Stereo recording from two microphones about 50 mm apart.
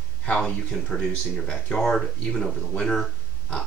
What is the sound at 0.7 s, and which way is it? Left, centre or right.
Speech, centre.